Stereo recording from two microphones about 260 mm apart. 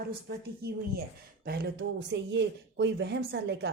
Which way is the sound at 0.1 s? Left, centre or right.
Right.